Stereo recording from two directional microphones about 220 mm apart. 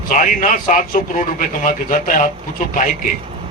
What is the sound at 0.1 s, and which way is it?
A man's voice, 35° left (ahead or behind).